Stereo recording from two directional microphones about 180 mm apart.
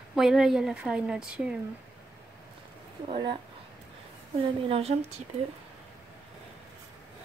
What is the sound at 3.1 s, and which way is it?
Speech, 30° right (ahead or behind).